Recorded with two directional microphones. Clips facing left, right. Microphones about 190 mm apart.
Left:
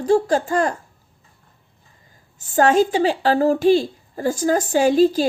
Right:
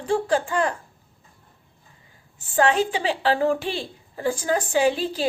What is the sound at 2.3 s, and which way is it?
A woman's voice, 40° left (ahead or behind).